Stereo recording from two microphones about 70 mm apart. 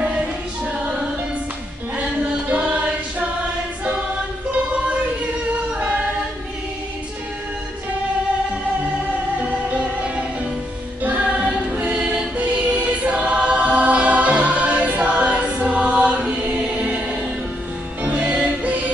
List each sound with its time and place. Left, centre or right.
2.5 s choir: right
4.5 s a sound: centre
9.4 s music: centre